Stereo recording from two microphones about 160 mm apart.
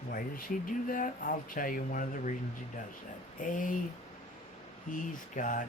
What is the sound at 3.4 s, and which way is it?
Speech, 55° left (ahead or behind).